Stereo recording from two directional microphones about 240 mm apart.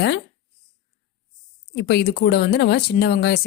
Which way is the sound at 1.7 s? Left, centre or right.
Left.